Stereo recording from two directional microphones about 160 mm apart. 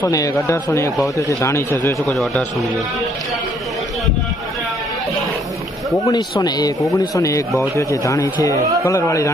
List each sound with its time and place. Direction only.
0.1 s a man's voice: 20° left (ahead or behind)
6.1 s speech: 25° left (ahead or behind)